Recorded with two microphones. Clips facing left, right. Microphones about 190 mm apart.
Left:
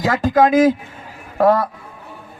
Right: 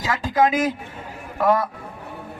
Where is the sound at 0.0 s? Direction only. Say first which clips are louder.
Left 6 dB; 60° left (ahead or behind).